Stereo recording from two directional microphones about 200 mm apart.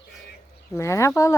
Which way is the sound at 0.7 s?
15° left (ahead or behind).